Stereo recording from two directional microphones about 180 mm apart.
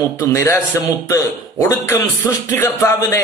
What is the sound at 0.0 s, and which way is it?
A man's voice, 15° left (ahead or behind).